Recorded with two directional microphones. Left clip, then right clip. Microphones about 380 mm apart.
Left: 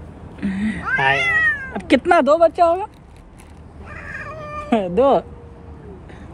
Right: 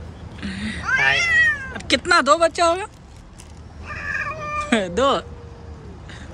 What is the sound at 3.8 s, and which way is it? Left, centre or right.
Cat, left.